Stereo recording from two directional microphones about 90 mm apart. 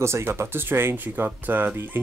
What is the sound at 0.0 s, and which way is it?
Speech, 30° right (ahead or behind).